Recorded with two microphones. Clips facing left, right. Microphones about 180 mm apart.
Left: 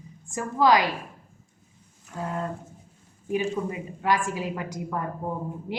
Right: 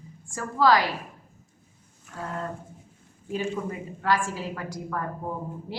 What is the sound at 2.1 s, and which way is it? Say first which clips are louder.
Speech: left 3 dB; 20° left (ahead or behind).